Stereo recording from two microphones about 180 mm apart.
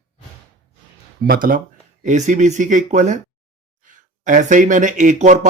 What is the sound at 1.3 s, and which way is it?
Speech, 50° right (ahead or behind).